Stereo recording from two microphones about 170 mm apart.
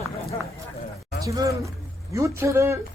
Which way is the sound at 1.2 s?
20° right (ahead or behind).